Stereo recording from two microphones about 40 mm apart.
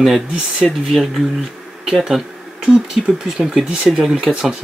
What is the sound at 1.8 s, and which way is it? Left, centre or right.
Speech, centre.